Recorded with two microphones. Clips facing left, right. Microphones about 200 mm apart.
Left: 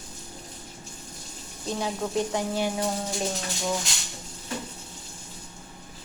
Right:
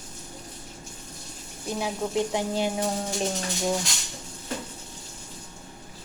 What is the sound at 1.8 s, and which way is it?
Speech, 15° right (ahead or behind).